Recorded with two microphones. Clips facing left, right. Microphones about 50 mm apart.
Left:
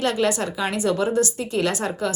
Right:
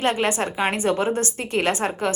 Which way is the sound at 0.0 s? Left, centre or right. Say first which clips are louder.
Even; right.